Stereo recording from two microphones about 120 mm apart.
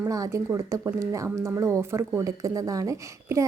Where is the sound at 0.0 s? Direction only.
25° right (ahead or behind).